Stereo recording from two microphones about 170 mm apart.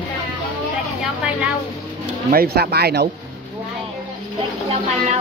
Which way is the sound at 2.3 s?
65° right (ahead or behind).